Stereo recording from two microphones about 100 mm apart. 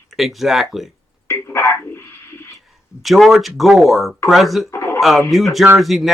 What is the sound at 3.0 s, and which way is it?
Speech, centre (ahead or behind).